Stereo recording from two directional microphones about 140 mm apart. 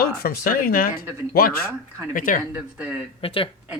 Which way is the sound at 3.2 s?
40° left (ahead or behind).